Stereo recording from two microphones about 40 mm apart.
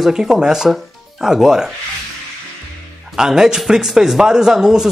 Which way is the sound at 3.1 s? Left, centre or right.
Centre.